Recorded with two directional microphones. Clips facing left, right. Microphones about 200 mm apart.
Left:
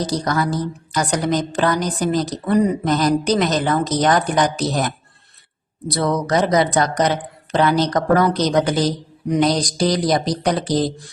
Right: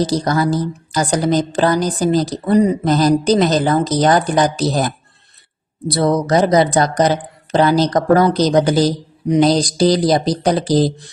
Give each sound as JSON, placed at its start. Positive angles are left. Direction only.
{"t": 0.0, "sound": "a woman's voice", "side_deg": -30}